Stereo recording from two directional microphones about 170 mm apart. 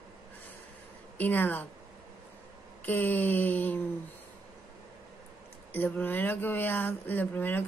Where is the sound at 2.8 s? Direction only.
10° left (ahead or behind).